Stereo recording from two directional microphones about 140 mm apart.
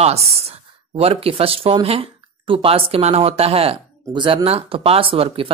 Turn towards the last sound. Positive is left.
turn(degrees=-40)  # may be behind; listen again after turning